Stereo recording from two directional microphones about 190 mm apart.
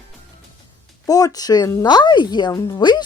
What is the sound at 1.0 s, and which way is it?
A woman's voice, 20° left (ahead or behind).